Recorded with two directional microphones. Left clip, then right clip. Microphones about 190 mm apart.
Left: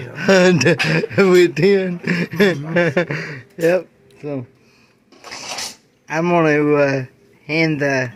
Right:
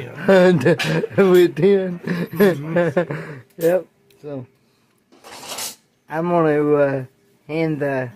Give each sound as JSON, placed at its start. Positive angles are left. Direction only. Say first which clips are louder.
{"t": 0.1, "sound": "speech", "louder": "even", "side_deg": 0}
{"t": 4.2, "sound": "speech", "louder": "left 5 dB", "side_deg": 20}
{"t": 6.0, "sound": "speech", "louder": "left 2 dB", "side_deg": 0}